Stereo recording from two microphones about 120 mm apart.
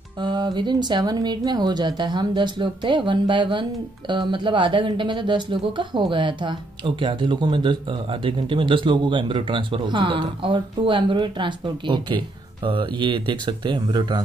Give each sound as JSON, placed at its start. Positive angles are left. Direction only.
{"t": 0.2, "sound": "speech", "side_deg": -40}